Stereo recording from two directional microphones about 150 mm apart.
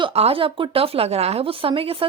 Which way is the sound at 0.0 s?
40° right (ahead or behind).